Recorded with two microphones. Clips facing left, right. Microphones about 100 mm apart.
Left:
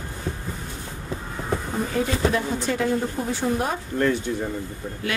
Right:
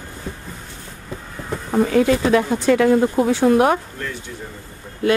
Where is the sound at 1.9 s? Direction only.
90° right.